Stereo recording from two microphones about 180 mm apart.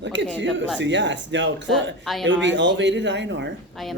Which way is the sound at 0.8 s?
85° right.